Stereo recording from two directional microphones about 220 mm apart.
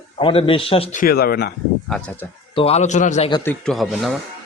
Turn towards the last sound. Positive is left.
turn(degrees=0)  # may be behind; listen again after turning